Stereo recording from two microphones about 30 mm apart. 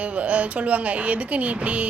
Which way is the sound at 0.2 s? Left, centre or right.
Right.